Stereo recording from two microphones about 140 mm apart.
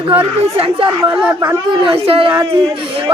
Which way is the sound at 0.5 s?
40° right (ahead or behind).